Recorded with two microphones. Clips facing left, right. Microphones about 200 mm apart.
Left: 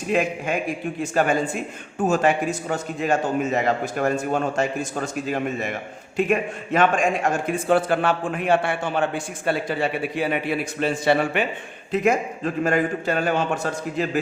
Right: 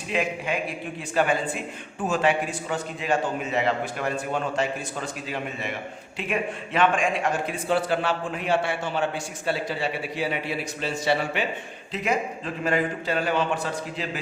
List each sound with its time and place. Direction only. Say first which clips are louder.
0.1 s a man's voice: left 4 dB; 45° left (ahead or behind)